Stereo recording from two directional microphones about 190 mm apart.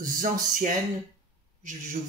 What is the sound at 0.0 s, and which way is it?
Speech, 45° right (ahead or behind).